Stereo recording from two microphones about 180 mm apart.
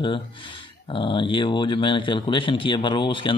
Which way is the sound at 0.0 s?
25° left (ahead or behind).